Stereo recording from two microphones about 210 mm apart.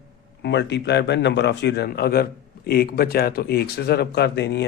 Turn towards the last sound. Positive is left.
turn(degrees=55)  # may be behind; listen again after turning